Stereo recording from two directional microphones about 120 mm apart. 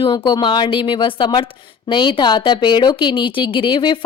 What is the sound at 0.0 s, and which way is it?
Speech, 40° left (ahead or behind).